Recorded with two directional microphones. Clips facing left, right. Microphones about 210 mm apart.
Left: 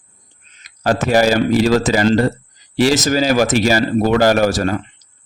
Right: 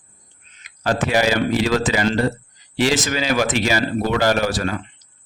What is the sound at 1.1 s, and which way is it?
Speech, 40° left (ahead or behind).